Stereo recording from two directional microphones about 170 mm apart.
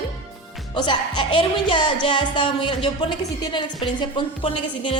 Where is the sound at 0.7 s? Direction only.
25° left (ahead or behind).